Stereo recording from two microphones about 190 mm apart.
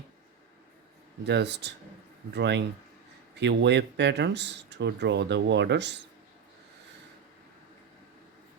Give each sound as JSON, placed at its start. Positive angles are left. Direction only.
{"t": 1.2, "sound": "speech", "side_deg": -65}